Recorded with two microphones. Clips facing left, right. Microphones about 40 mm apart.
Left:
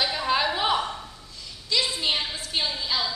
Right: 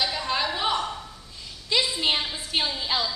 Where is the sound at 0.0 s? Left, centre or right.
Centre.